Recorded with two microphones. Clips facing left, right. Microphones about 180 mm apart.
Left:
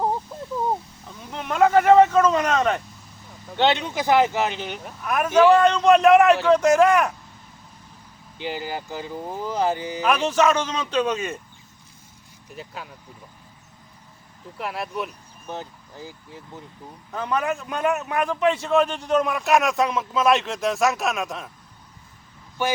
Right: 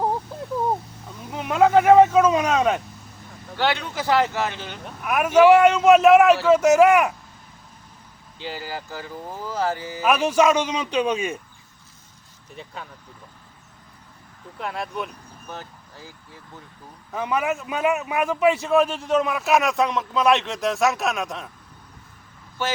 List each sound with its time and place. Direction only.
1.3 s a man's voice: 5° right (ahead or behind)
3.6 s speech: 20° left (ahead or behind)
5.0 s a man's voice: 10° right (ahead or behind)
8.4 s speech: 20° left (ahead or behind)
10.0 s a man's voice: 10° right (ahead or behind)
12.5 s a man's voice: 5° left (ahead or behind)
14.6 s a man's voice: 5° left (ahead or behind)
15.4 s speech: 20° left (ahead or behind)
17.1 s a man's voice: 5° right (ahead or behind)
22.6 s speech: 15° left (ahead or behind)